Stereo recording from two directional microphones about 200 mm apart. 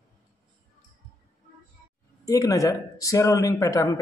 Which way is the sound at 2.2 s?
15° left (ahead or behind).